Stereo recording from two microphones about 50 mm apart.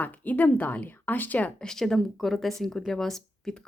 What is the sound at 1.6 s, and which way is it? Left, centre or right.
Speech, centre.